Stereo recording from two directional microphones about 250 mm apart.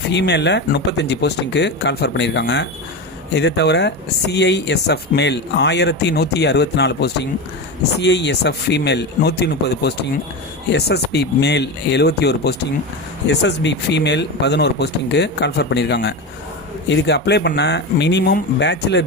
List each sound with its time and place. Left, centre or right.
0.1 s speech: left